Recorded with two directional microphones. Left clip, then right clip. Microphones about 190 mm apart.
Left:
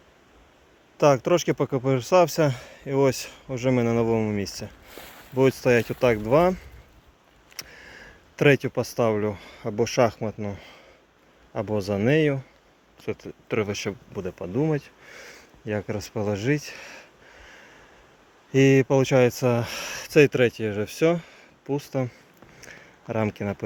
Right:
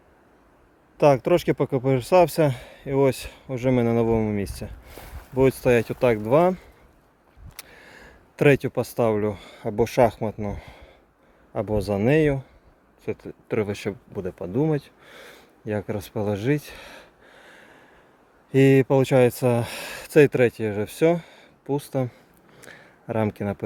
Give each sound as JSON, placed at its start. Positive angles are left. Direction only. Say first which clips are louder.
{"t": 0.9, "sound": "speech", "louder": "right 1 dB", "side_deg": -10}
{"t": 22.6, "sound": "a sound", "louder": "right 1 dB", "side_deg": -15}
{"t": 23.4, "sound": "speech", "louder": "right 1 dB", "side_deg": -15}